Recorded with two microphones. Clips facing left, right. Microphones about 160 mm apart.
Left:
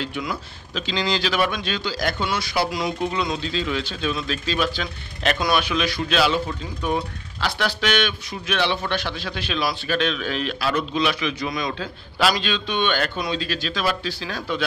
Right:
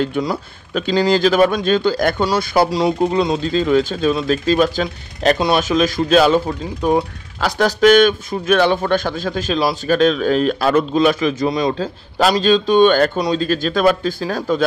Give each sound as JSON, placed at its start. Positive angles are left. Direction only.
{"t": 0.0, "sound": "speech", "side_deg": -40}